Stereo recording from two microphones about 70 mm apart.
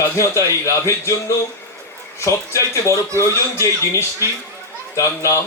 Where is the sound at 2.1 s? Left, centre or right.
Left.